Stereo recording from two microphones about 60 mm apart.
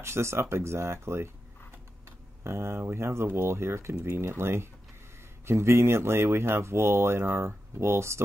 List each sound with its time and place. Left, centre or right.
0.0 s speech: right